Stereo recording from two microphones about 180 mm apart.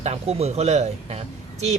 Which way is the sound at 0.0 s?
35° right (ahead or behind).